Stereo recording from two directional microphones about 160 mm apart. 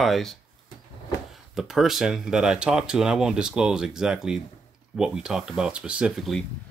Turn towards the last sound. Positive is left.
turn(degrees=0)  # may be behind; listen again after turning